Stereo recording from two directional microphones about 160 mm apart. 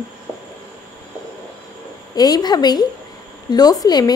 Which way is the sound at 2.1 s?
25° left (ahead or behind).